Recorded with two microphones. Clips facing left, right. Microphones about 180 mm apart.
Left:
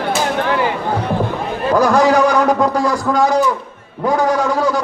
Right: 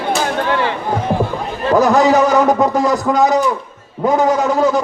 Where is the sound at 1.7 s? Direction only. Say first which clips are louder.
Right 1 dB; 20° right (ahead or behind).